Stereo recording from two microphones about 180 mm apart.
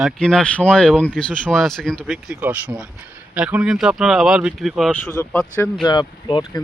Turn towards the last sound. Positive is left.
turn(degrees=25)  # may be behind; listen again after turning